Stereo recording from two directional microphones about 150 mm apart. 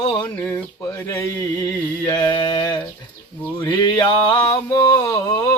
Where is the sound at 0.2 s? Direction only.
10° left (ahead or behind).